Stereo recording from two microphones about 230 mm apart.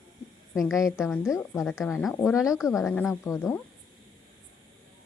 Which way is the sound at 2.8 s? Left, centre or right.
Centre.